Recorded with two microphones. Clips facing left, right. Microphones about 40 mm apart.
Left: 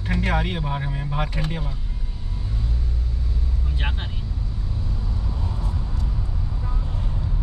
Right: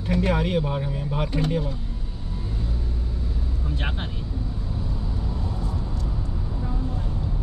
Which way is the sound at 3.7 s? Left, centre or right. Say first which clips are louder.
Right 1 dB; centre.